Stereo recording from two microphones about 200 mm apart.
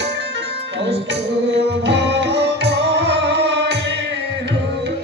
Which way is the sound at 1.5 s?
55° right (ahead or behind).